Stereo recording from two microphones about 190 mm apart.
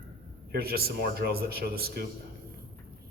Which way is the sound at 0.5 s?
55° right (ahead or behind).